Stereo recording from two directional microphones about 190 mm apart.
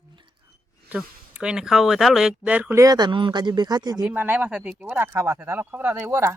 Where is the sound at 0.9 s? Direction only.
5° right (ahead or behind).